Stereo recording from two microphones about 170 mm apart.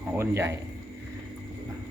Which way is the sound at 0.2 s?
15° right (ahead or behind).